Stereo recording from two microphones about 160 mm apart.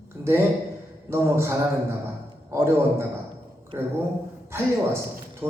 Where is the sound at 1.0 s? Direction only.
15° right (ahead or behind).